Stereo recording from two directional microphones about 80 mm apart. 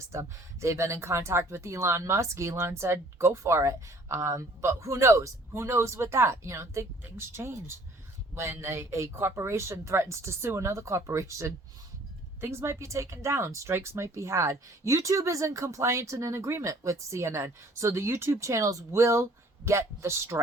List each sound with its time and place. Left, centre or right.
0.1 s speech: right